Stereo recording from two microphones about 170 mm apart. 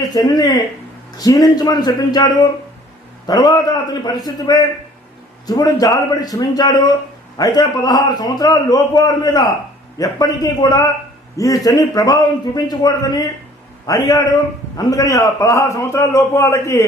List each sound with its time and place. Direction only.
0.1 s a man's voice: 20° left (ahead or behind)